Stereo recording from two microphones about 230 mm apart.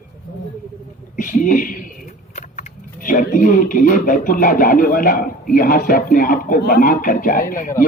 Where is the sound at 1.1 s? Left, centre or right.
Left.